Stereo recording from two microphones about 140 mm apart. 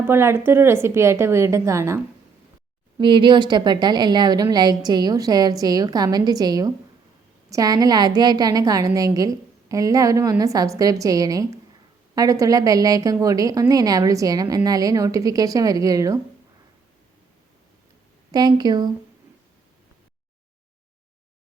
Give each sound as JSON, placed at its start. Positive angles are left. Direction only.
{"t": 0.1, "sound": "a woman's voice", "side_deg": -15}
{"t": 3.0, "sound": "a woman's voice", "side_deg": -35}
{"t": 18.3, "sound": "a woman's voice", "side_deg": -30}